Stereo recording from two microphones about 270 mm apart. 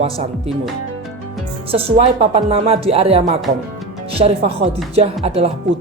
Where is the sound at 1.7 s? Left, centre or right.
Right.